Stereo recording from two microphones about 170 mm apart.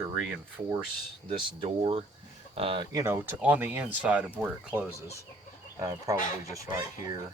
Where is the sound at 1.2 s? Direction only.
35° right (ahead or behind).